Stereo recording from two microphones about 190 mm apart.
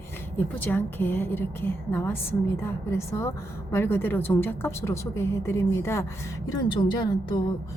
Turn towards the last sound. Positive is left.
turn(degrees=25)  # may be behind; listen again after turning